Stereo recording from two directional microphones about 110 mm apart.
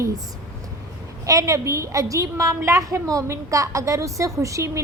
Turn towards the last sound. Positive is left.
turn(degrees=-30)  # may be behind; listen again after turning